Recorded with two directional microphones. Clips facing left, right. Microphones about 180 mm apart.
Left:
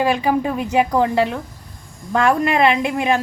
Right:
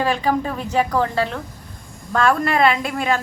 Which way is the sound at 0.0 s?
15° left (ahead or behind).